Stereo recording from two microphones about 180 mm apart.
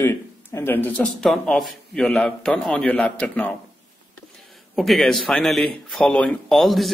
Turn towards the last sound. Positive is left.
turn(degrees=0)  # may be behind; listen again after turning